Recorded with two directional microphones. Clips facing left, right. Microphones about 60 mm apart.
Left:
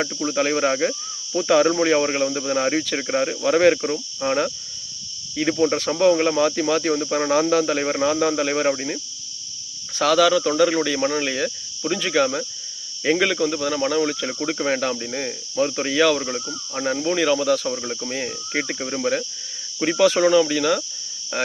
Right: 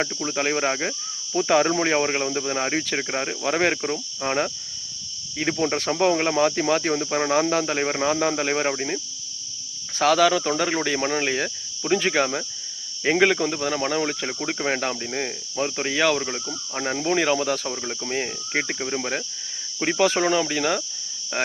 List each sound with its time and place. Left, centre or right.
0.0 s speech: centre
1.4 s speech: right
9.9 s speech: right
14.3 s speech: centre
17.7 s speech: centre
18.0 s speech: right